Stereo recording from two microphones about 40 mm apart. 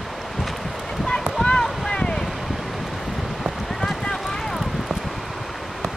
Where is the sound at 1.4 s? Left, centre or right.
Left.